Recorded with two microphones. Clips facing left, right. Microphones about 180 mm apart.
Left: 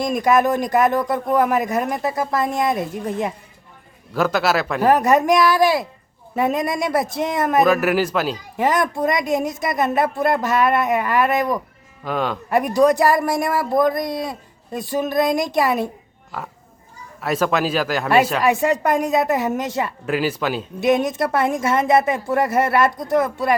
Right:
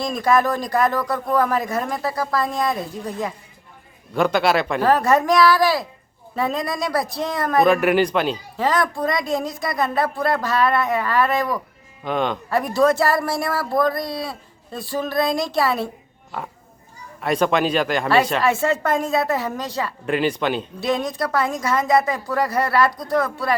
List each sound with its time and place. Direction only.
0.0 s speech: 20° left (ahead or behind)
4.1 s speech: 5° left (ahead or behind)
4.8 s speech: 20° left (ahead or behind)
7.6 s speech: 5° left (ahead or behind)
8.5 s speech: 20° left (ahead or behind)
12.0 s speech: 5° left (ahead or behind)
12.5 s a man's voice: 20° left (ahead or behind)
17.2 s speech: 5° left (ahead or behind)
18.4 s a man's voice: 15° left (ahead or behind)
20.1 s speech: 5° left (ahead or behind)
20.8 s speech: 20° left (ahead or behind)